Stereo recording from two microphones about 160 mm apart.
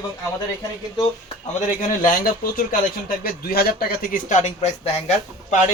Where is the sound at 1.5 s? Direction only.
50° left (ahead or behind).